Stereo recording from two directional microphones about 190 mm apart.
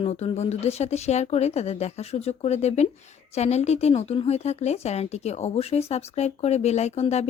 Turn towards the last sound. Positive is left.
turn(degrees=35)  # may be behind; listen again after turning